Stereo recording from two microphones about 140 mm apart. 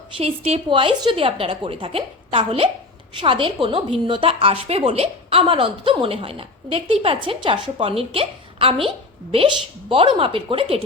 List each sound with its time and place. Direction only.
0.2 s a woman's voice: 45° right (ahead or behind)
9.9 s a woman's voice: 40° right (ahead or behind)